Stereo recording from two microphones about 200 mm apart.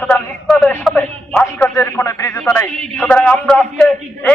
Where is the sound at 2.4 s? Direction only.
10° left (ahead or behind).